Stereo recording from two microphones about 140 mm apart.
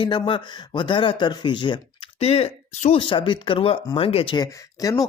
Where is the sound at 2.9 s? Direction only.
35° left (ahead or behind).